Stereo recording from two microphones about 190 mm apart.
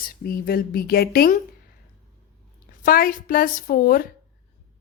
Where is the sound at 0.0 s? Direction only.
50° left (ahead or behind).